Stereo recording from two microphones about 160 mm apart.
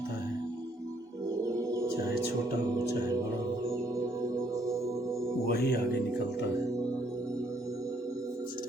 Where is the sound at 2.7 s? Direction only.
20° right (ahead or behind).